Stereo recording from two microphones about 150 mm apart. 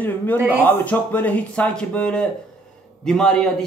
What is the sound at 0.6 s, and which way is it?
A man's voice, 10° left (ahead or behind).